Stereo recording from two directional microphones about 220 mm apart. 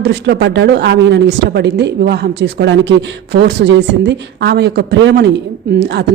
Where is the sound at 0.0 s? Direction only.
50° right (ahead or behind).